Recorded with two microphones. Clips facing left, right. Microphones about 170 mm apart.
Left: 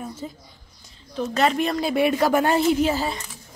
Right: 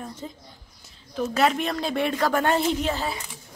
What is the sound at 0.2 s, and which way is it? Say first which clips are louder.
A woman's voice: left 2 dB; 5° left (ahead or behind).